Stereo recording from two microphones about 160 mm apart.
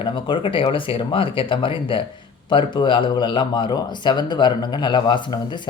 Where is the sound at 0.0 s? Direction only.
30° left (ahead or behind).